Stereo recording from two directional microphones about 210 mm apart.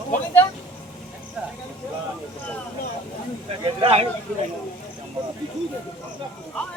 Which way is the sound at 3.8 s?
30° right (ahead or behind).